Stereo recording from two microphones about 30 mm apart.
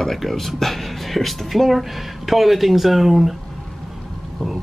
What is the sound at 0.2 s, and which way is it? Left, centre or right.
Speech, centre.